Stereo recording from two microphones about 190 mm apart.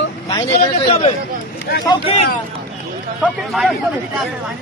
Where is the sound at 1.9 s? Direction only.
30° left (ahead or behind).